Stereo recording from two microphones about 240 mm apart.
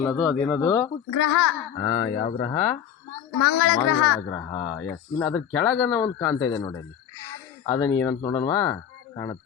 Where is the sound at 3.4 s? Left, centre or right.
Left.